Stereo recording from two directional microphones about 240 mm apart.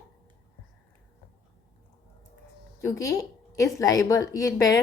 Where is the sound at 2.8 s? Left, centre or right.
Centre.